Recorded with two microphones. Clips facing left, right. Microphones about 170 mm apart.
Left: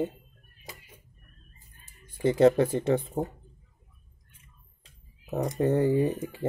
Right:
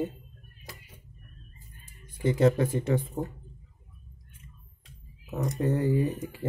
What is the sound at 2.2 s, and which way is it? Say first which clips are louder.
Speech: left 3 dB; 35° left (ahead or behind).